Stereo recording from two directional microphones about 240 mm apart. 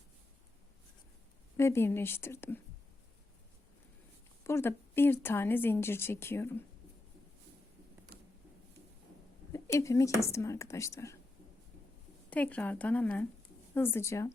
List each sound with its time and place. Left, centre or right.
1.5 s a woman's voice: centre
4.4 s a woman's voice: centre
8.1 s a sound: right
9.5 s a woman's voice: centre
12.3 s a woman's voice: centre